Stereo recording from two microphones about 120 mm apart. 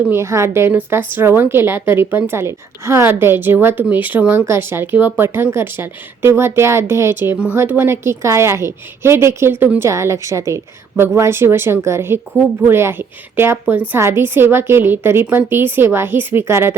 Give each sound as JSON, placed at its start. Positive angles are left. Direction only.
{"t": 0.1, "sound": "a woman's voice", "side_deg": -25}